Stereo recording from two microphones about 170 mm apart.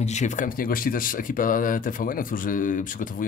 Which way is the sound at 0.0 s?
45° left (ahead or behind).